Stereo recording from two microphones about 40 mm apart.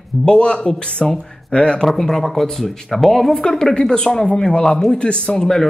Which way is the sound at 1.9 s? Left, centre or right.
Centre.